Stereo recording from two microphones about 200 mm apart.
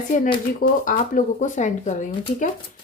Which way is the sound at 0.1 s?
40° left (ahead or behind).